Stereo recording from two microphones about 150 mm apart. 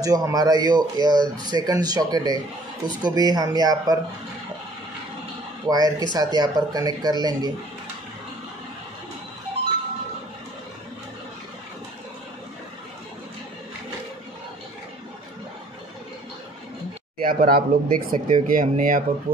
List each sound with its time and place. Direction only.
0.0 s speech: 25° right (ahead or behind)
5.7 s speech: 25° right (ahead or behind)
17.2 s speech: 70° right (ahead or behind)